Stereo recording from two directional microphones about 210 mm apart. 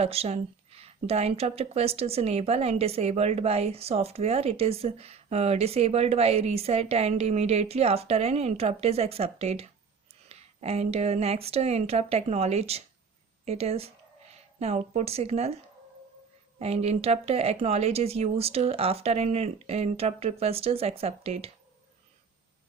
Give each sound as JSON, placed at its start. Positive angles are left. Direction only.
{"t": 0.0, "sound": "speech", "side_deg": -30}
{"t": 16.6, "sound": "speech", "side_deg": -30}